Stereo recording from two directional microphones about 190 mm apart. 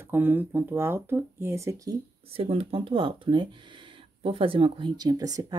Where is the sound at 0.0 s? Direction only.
10° right (ahead or behind).